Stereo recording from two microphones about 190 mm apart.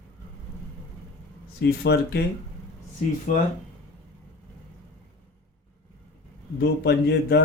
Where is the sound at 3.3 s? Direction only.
45° left (ahead or behind).